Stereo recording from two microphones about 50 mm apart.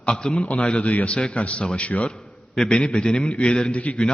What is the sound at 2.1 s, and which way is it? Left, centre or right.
A man's voice, centre.